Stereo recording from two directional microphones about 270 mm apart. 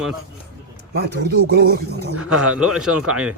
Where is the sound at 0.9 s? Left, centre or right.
Right.